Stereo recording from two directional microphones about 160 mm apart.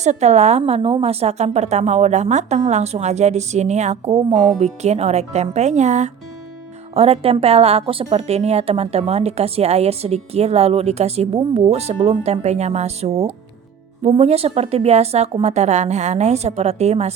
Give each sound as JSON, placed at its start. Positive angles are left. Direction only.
{"t": 0.0, "sound": "a woman's voice", "side_deg": -45}